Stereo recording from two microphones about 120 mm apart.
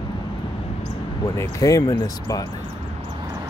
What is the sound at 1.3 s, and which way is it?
Speech, 25° left (ahead or behind).